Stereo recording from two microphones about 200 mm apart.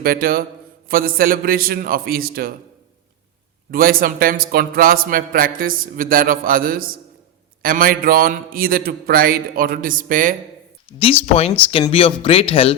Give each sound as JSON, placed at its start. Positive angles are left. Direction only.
{"t": 0.0, "sound": "a man's voice", "side_deg": -45}
{"t": 3.7, "sound": "a man's voice", "side_deg": -45}
{"t": 11.0, "sound": "speech", "side_deg": 30}